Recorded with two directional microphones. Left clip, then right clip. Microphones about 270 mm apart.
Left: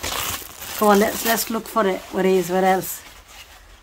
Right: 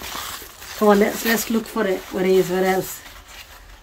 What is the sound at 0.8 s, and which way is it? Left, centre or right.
Speech, centre.